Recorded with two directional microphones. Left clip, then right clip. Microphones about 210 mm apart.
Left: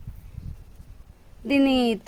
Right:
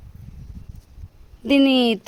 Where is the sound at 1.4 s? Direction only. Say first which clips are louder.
Right 4 dB; 40° right (ahead or behind).